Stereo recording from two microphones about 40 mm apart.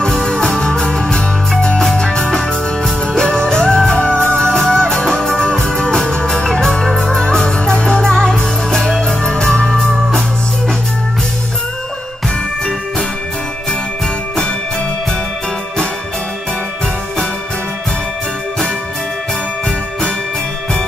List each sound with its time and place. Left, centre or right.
0.0 s music: centre